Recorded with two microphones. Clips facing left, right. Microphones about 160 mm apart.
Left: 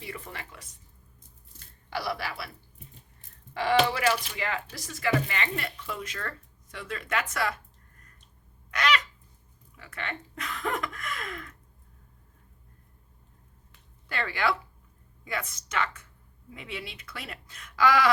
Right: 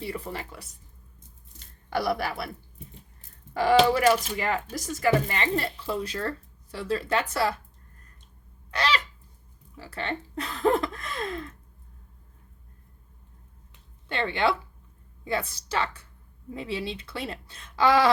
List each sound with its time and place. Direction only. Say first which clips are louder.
0.0 s speech: right 7 dB; 35° right (ahead or behind)
1.9 s speech: right 6 dB; 50° right (ahead or behind)
3.5 s speech: right 5 dB; 40° right (ahead or behind)
8.7 s goose: even; 30° right (ahead or behind)
9.7 s speech: right 5 dB; 30° right (ahead or behind)
14.1 s speech: right 3 dB; 25° right (ahead or behind)